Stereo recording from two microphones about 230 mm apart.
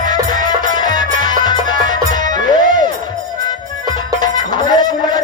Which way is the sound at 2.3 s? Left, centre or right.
Right.